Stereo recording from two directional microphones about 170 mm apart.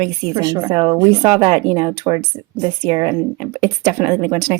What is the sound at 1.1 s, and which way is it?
A woman's voice, 35° right (ahead or behind).